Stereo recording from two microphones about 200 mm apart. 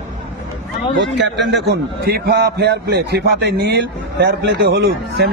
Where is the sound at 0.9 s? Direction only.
60° right (ahead or behind).